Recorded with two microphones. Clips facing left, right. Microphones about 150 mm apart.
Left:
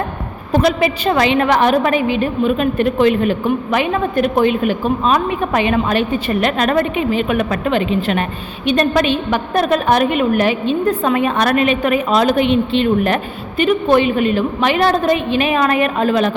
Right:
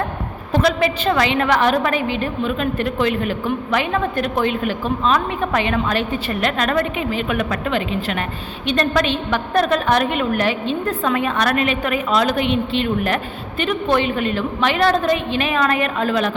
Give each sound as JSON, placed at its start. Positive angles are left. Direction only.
{"t": 0.5, "sound": "a woman's voice", "side_deg": 15}
{"t": 13.6, "sound": "a woman's voice", "side_deg": 10}